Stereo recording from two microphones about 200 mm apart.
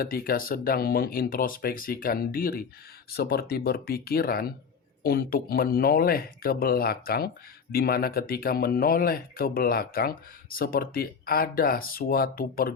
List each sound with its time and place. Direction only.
0.0 s speech: 45° left (ahead or behind)